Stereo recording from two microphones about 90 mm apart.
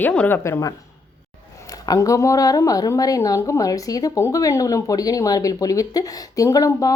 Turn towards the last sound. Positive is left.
turn(degrees=40)  # may be behind; listen again after turning